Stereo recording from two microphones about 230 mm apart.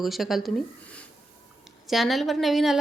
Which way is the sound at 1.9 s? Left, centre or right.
Centre.